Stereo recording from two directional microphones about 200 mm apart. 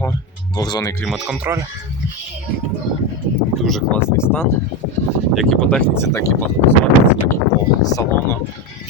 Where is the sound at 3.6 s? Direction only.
Centre (ahead or behind).